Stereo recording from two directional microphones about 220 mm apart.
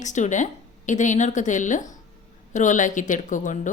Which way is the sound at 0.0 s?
35° left (ahead or behind).